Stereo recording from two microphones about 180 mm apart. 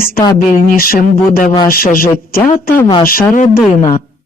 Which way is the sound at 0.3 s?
55° left (ahead or behind).